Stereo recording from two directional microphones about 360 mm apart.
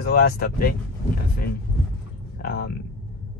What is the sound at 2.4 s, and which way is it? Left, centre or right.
Speech, left.